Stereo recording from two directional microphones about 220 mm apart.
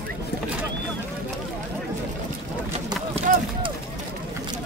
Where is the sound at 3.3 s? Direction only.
40° right (ahead or behind).